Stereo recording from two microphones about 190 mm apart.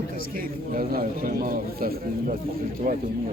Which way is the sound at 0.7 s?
50° right (ahead or behind).